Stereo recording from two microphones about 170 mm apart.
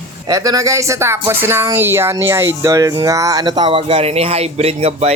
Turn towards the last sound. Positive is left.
turn(degrees=-40)  # may be behind; listen again after turning